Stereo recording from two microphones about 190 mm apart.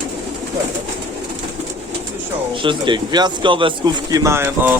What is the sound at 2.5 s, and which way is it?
Speech, 25° right (ahead or behind).